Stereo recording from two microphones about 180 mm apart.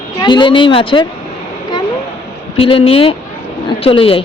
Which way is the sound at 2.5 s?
30° left (ahead or behind).